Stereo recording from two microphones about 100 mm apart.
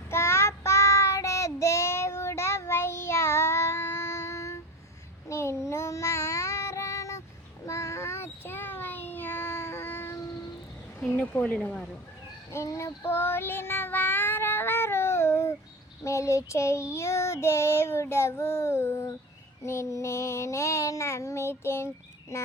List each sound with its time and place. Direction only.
0.1 s child singing: 25° left (ahead or behind)
11.2 s speech: 15° left (ahead or behind)
12.5 s child singing: 30° left (ahead or behind)
22.3 s a sound: 30° left (ahead or behind)